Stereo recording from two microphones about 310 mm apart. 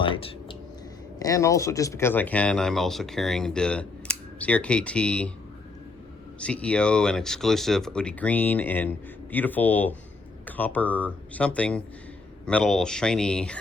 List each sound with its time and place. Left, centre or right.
0.0 s a sound: centre
1.2 s speech: centre
6.4 s speech: centre